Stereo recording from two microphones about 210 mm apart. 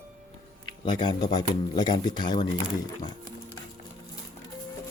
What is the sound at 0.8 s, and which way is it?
Speech, 20° left (ahead or behind).